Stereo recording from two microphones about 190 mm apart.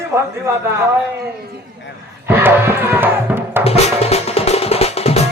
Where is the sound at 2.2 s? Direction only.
10° right (ahead or behind).